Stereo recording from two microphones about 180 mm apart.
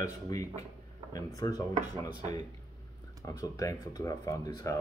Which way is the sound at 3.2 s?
20° left (ahead or behind).